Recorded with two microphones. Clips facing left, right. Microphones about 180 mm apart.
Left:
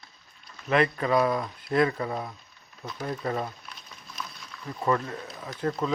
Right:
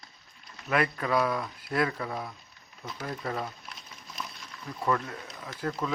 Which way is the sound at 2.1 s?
10° left (ahead or behind).